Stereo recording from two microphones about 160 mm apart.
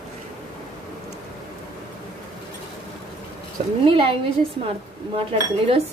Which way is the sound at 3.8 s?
35° right (ahead or behind).